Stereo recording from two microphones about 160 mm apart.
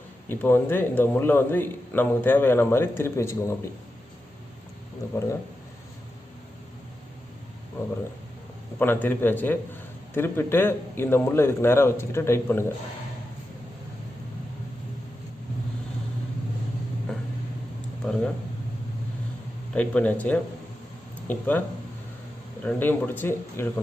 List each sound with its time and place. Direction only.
0.3 s a man's voice: 15° left (ahead or behind)
8.8 s a man's voice: 10° left (ahead or behind)
18.0 s a sound: 5° left (ahead or behind)
19.7 s a man's voice: 10° left (ahead or behind)
22.6 s a man's voice: 10° left (ahead or behind)